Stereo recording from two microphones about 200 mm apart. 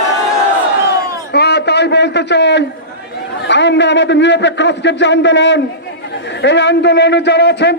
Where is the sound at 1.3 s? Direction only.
55° left (ahead or behind).